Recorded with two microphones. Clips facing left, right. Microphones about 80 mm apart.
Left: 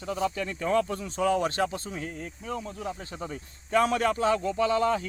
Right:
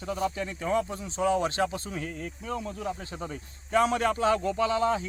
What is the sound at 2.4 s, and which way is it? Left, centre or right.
Speech, right.